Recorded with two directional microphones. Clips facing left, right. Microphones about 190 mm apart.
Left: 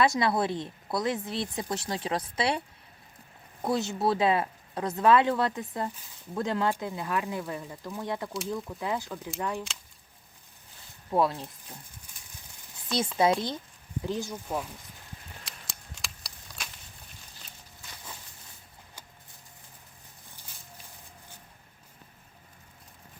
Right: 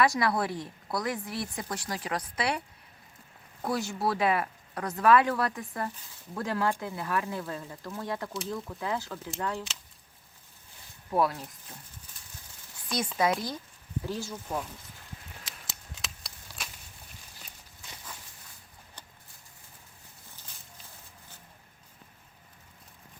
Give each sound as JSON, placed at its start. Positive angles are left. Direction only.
{"t": 0.0, "sound": "speech", "side_deg": 20}
{"t": 3.6, "sound": "speech", "side_deg": 20}
{"t": 11.1, "sound": "speech", "side_deg": 25}
{"t": 12.1, "sound": "horse", "side_deg": 10}
{"t": 13.2, "sound": "speech", "side_deg": 25}
{"t": 15.4, "sound": "a sound", "side_deg": 0}